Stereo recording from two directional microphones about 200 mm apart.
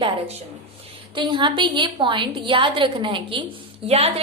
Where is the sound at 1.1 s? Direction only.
25° right (ahead or behind).